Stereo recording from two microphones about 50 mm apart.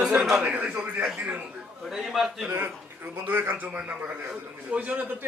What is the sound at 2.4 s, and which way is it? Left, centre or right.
Speech, right.